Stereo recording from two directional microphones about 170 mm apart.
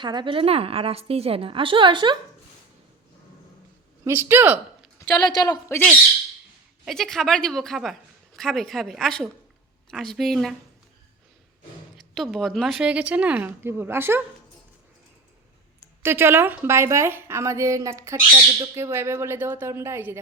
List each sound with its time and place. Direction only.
0.0 s a woman's voice: 25° right (ahead or behind)
4.0 s a woman's voice: 15° right (ahead or behind)
5.2 s a woman's voice: 25° left (ahead or behind)
6.8 s a woman's voice: centre (ahead or behind)
12.1 s a woman's voice: centre (ahead or behind)
16.0 s a woman's voice: 15° right (ahead or behind)